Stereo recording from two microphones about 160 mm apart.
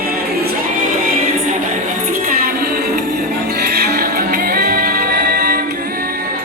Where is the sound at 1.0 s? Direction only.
55° right (ahead or behind).